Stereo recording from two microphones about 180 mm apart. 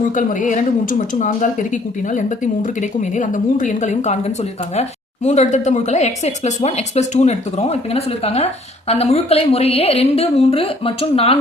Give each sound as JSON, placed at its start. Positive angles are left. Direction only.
{"t": 0.0, "sound": "a woman's voice", "side_deg": 45}